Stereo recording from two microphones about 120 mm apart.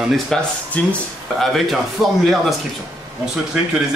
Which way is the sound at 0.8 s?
15° left (ahead or behind).